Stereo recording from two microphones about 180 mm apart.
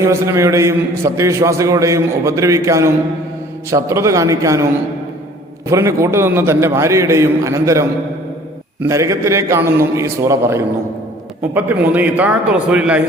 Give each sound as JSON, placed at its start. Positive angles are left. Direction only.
{"t": 0.0, "sound": "a man's voice", "side_deg": -15}
{"t": 5.6, "sound": "a man's voice", "side_deg": -15}